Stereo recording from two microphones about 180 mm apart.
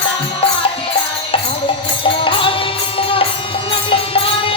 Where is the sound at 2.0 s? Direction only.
30° left (ahead or behind).